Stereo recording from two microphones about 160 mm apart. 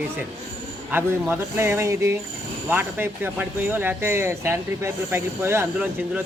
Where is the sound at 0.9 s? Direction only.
15° right (ahead or behind).